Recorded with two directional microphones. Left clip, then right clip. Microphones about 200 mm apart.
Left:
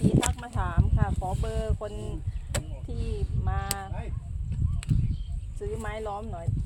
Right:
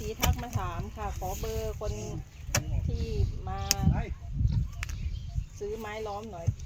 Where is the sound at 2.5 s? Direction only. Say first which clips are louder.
Right 3 dB; 15° left (ahead or behind).